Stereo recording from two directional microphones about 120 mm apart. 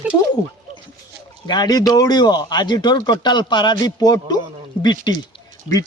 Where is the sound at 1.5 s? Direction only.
35° left (ahead or behind).